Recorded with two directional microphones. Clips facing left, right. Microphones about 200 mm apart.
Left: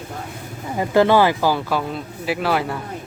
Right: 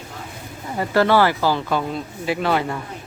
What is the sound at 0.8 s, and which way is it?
Speech, 15° left (ahead or behind).